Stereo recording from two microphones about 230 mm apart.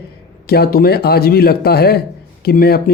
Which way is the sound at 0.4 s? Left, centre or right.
Left.